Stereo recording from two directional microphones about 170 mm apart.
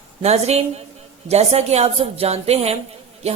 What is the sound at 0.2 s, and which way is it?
Speech, 40° right (ahead or behind).